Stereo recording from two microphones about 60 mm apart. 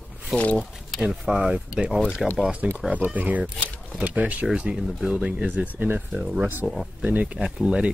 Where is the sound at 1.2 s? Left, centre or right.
Centre.